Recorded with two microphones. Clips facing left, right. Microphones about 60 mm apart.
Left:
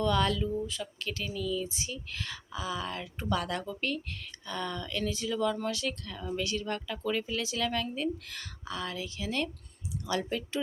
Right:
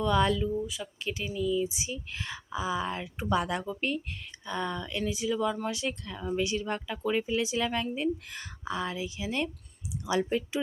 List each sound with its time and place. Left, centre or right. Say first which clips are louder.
0.0 s speech: right 2 dB; centre